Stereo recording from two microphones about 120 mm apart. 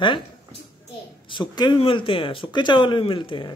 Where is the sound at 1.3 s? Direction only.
40° left (ahead or behind).